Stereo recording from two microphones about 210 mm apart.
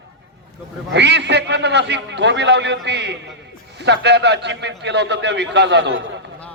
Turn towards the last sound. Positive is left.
turn(degrees=-60)  # may be behind; listen again after turning